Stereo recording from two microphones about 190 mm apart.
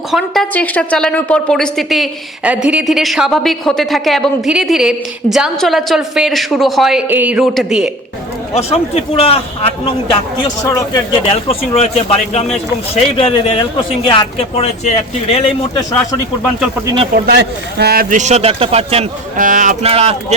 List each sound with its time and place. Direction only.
0.1 s speech: centre (ahead or behind)
8.5 s speech: 30° left (ahead or behind)
16.8 s speech: 25° right (ahead or behind)
17.2 s a man's voice: 60° right (ahead or behind); by 19.0 s 30° right (ahead or behind)
19.4 s speech: 45° right (ahead or behind)
19.9 s a man's voice: 30° right (ahead or behind)